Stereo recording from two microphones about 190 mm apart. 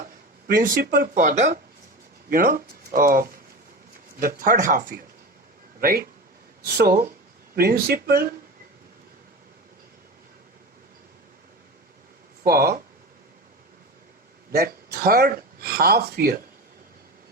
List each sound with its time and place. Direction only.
0.4 s speech: 45° right (ahead or behind)
12.5 s speech: 55° right (ahead or behind)
14.5 s speech: 55° right (ahead or behind)